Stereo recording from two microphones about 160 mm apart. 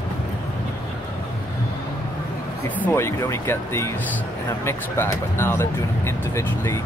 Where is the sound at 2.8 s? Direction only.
15° left (ahead or behind).